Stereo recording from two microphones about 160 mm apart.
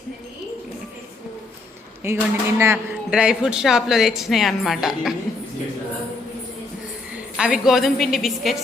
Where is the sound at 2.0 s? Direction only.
15° right (ahead or behind).